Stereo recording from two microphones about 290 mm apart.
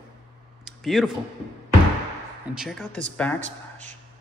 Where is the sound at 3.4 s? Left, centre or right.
Right.